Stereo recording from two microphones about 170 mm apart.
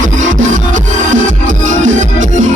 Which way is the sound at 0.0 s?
50° right (ahead or behind).